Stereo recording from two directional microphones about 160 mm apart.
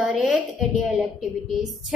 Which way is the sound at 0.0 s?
Centre (ahead or behind).